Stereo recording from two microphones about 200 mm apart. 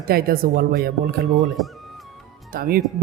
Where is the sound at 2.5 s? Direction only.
45° right (ahead or behind).